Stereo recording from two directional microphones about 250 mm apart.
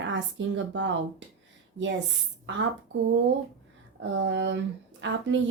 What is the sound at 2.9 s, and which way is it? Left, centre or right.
A woman's voice, right.